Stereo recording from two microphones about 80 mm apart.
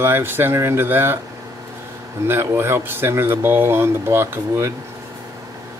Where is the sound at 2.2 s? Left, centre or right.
Right.